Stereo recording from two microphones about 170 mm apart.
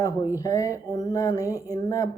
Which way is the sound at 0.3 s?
20° left (ahead or behind).